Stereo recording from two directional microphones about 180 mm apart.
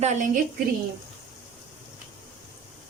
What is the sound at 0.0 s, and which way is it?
Speech, 40° right (ahead or behind).